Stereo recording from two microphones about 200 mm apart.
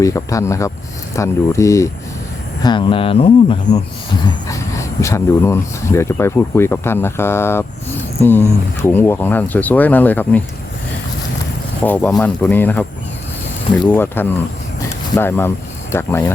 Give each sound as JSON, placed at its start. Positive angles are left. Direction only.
{"t": 0.0, "sound": "speech", "side_deg": 15}
{"t": 4.4, "sound": "speech", "side_deg": 15}
{"t": 11.8, "sound": "speech", "side_deg": 10}
{"t": 13.8, "sound": "speech", "side_deg": 10}